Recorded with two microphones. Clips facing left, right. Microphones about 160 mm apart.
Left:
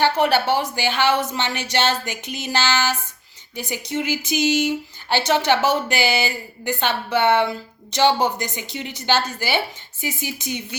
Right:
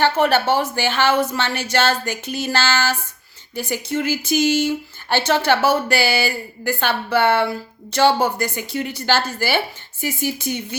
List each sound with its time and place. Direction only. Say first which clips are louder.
0.2 s speech: right 2 dB; 15° left (ahead or behind)